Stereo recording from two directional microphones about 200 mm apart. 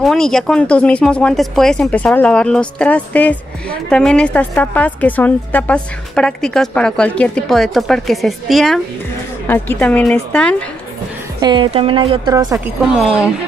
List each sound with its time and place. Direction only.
0.0 s a woman's voice: centre (ahead or behind)
11.4 s speech: 25° right (ahead or behind)
12.5 s a woman's voice: 5° right (ahead or behind)